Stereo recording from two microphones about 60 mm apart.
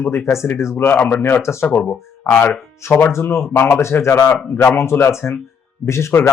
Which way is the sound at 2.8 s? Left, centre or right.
Left.